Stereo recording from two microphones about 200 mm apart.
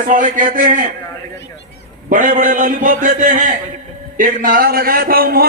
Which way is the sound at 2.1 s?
40° right (ahead or behind).